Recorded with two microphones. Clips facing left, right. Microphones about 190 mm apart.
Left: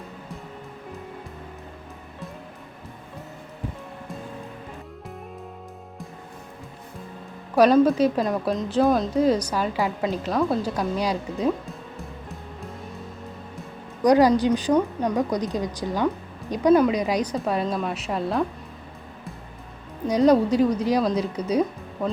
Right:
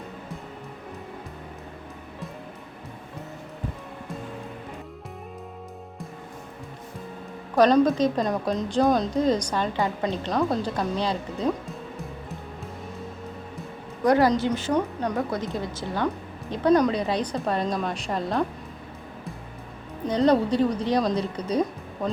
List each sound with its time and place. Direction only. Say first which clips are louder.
7.5 s a woman's voice: left 2 dB; 10° left (ahead or behind)
14.0 s a woman's voice: left 3 dB; 15° left (ahead or behind)
20.1 s a woman's voice: left 3 dB; 10° left (ahead or behind)